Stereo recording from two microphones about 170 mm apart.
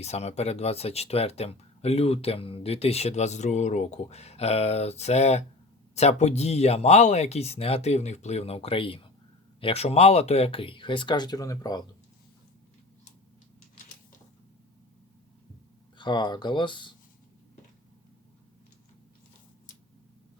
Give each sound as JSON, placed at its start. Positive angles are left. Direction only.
{"t": 0.0, "sound": "speech", "side_deg": 40}
{"t": 16.0, "sound": "speech", "side_deg": 25}